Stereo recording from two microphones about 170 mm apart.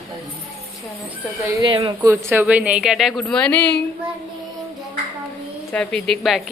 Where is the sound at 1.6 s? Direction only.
30° right (ahead or behind).